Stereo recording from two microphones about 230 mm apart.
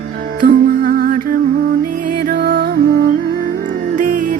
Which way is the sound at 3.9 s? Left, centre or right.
Right.